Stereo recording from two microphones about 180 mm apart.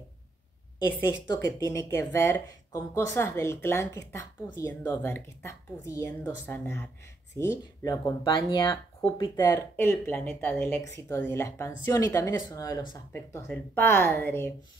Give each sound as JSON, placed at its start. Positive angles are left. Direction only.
{"t": 1.2, "sound": "speech", "side_deg": 20}